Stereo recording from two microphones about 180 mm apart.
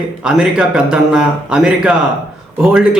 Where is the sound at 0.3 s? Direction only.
5° right (ahead or behind).